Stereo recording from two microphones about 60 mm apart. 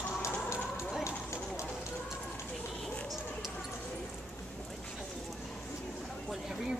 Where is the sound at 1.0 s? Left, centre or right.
Left.